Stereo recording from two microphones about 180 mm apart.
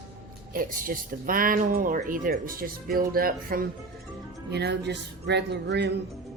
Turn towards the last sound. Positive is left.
turn(degrees=-70)  # may be behind; listen again after turning